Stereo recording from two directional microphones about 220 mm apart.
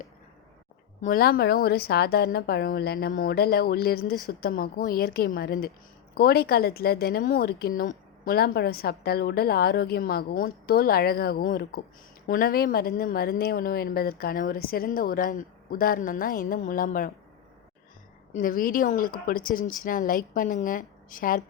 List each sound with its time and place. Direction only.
1.0 s a woman's voice: 40° left (ahead or behind)
18.3 s a woman's voice: 40° left (ahead or behind)